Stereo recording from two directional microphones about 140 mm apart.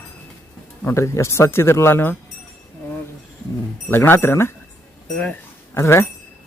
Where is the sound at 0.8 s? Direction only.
20° left (ahead or behind).